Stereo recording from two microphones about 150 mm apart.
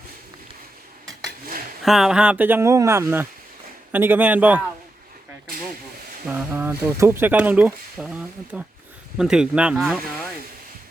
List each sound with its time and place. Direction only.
1.8 s speech: centre (ahead or behind)
6.2 s speech: 15° right (ahead or behind)